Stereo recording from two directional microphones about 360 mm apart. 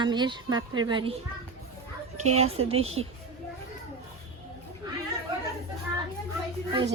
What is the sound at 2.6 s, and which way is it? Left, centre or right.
Speech, right.